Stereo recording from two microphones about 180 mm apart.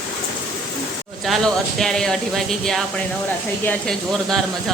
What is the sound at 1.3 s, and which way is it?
Speech, 5° left (ahead or behind).